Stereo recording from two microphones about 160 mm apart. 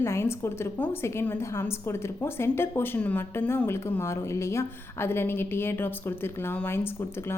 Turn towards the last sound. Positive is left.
turn(degrees=15)  # may be behind; listen again after turning